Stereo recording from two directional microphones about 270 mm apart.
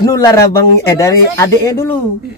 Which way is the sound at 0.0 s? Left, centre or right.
Centre.